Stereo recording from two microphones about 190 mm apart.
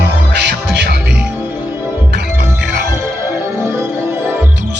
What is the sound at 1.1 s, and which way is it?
Music, 5° right (ahead or behind).